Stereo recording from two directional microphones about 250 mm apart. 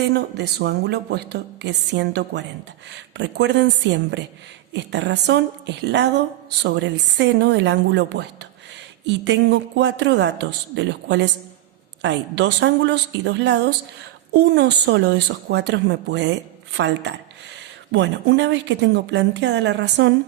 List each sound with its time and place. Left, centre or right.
0.0 s a woman's voice: right